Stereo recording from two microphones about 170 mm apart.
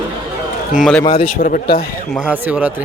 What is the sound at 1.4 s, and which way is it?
Speech, 55° left (ahead or behind).